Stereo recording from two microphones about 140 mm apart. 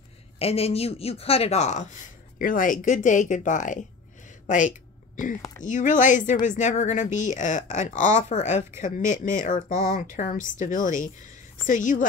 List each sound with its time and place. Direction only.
0.4 s speech: 45° left (ahead or behind)
2.3 s speech: 75° left (ahead or behind)
4.5 s a sound: 65° left (ahead or behind)
5.6 s a woman's voice: 65° left (ahead or behind)